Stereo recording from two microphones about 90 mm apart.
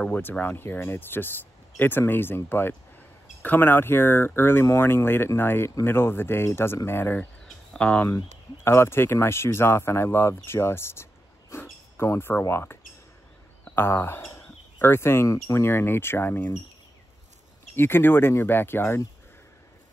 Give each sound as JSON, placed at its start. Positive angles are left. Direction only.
{"t": 0.1, "sound": "speech", "side_deg": 20}
{"t": 7.4, "sound": "cricket", "side_deg": 10}
{"t": 8.6, "sound": "speech", "side_deg": 30}
{"t": 11.5, "sound": "a sound", "side_deg": 30}
{"t": 12.0, "sound": "speech", "side_deg": 25}
{"t": 13.7, "sound": "speech", "side_deg": 25}
{"t": 17.7, "sound": "speech", "side_deg": 25}